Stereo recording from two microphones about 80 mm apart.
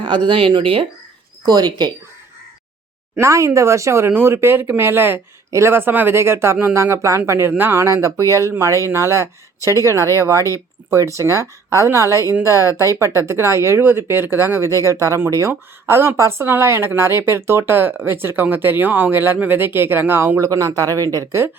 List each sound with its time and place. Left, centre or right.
0.0 s speech: right
1.5 s speech: right
3.2 s speech: right
20.5 s speech: right